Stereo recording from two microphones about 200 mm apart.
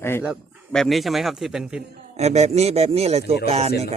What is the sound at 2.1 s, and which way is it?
Speech, 35° right (ahead or behind).